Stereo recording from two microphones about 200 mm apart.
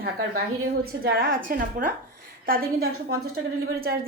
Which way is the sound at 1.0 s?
45° right (ahead or behind).